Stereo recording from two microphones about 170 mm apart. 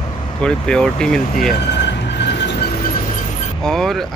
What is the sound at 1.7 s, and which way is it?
Vehicle, 90° left.